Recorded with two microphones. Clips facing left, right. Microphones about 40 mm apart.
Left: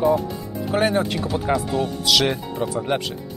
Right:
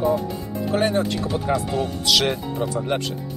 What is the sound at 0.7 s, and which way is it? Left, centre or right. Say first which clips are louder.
Speech: left 1 dB; centre.